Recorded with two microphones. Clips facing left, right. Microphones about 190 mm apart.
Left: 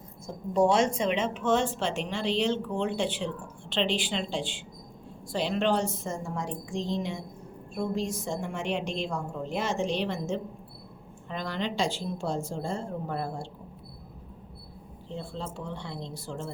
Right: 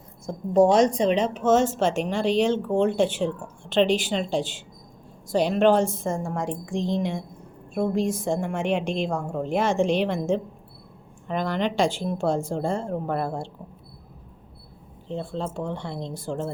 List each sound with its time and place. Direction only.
0.5 s a woman's voice: 40° right (ahead or behind)
15.2 s a woman's voice: 50° right (ahead or behind)